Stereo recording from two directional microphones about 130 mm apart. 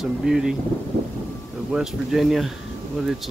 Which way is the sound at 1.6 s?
5° right (ahead or behind).